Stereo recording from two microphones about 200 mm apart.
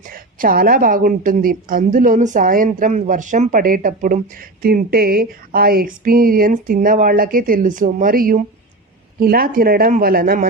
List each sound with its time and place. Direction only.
0.1 s a woman's voice: 45° right (ahead or behind)